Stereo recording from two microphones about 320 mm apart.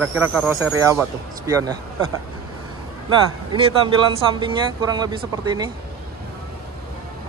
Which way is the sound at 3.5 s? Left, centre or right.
Centre.